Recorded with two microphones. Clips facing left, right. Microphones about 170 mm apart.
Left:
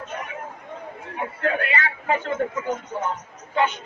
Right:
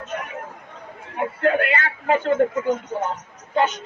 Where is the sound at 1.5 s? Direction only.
50° right (ahead or behind).